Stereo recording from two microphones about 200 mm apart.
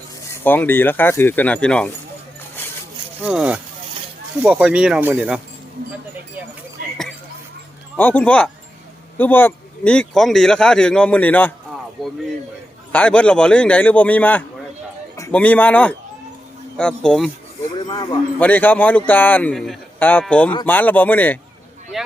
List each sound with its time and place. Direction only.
0.4 s speech: 10° left (ahead or behind)
3.2 s speech: 5° right (ahead or behind)
7.9 s speech: 10° left (ahead or behind)
12.9 s a man's voice: 5° left (ahead or behind)
17.8 s a sound: 20° left (ahead or behind)
18.3 s speech: 10° left (ahead or behind)
21.9 s boat: centre (ahead or behind)